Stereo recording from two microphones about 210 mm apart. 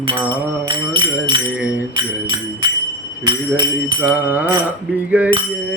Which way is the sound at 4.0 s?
10° right (ahead or behind).